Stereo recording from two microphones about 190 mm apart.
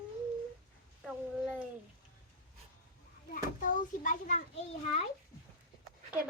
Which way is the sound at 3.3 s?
45° left (ahead or behind).